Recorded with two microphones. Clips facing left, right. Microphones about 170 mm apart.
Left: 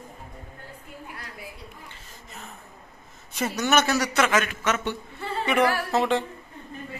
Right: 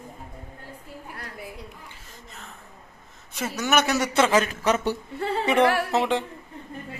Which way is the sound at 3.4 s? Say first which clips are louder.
Left 1 dB; 5° right (ahead or behind).